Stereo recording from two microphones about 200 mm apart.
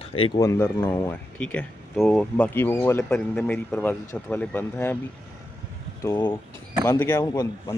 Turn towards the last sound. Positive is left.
turn(degrees=15)  # may be behind; listen again after turning